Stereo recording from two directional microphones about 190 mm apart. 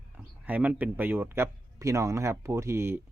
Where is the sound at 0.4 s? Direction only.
10° right (ahead or behind).